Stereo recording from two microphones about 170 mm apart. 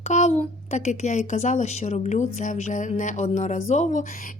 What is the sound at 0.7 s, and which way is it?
A woman's voice, 45° left (ahead or behind).